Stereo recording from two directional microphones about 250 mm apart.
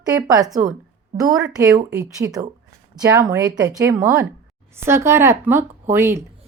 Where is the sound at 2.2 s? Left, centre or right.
Centre.